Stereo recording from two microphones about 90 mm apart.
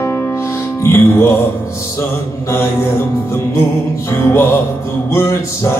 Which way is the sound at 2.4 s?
30° left (ahead or behind).